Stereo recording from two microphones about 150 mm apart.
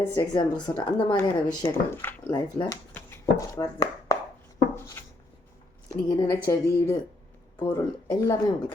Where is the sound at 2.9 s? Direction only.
15° left (ahead or behind).